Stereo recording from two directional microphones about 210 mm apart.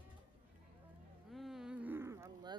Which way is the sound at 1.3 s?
Centre (ahead or behind).